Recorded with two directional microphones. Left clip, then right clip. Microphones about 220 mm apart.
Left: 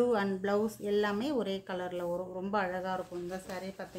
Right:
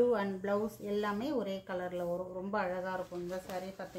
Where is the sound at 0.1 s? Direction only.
40° left (ahead or behind).